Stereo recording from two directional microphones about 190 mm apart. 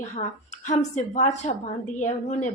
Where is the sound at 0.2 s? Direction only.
40° left (ahead or behind).